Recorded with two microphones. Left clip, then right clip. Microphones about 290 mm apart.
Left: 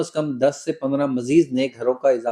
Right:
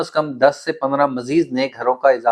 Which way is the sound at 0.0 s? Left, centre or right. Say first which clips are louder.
Right 5 dB; right.